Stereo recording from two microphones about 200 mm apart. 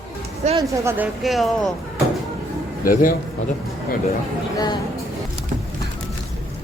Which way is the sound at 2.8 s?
45° left (ahead or behind).